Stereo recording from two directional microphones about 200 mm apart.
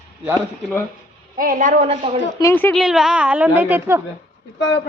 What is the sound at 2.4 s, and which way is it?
Speech, 15° left (ahead or behind).